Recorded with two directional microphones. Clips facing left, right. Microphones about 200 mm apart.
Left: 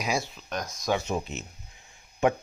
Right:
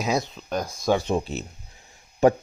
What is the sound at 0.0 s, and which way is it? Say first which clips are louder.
A man's voice: right 4 dB; 20° right (ahead or behind).